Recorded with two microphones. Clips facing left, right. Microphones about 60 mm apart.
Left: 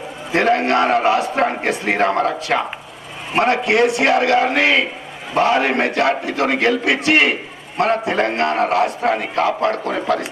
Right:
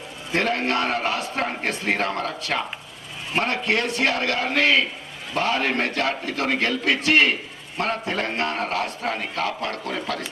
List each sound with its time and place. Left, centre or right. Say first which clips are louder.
0.6 s a man's voice: left 8 dB; centre